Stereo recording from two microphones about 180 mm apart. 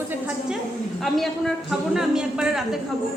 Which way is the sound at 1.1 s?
Centre (ahead or behind).